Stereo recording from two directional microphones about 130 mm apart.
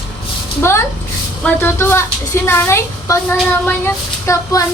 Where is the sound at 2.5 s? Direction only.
20° left (ahead or behind).